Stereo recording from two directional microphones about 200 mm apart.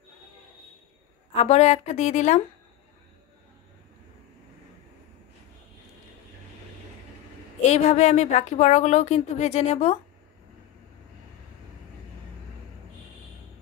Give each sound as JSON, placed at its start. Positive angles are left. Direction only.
{"t": 1.3, "sound": "a woman's voice", "side_deg": 30}
{"t": 7.6, "sound": "a woman's voice", "side_deg": 35}